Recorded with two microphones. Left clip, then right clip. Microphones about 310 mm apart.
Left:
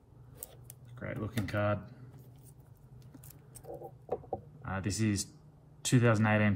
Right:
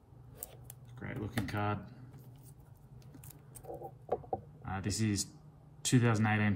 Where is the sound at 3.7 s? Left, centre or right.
Centre.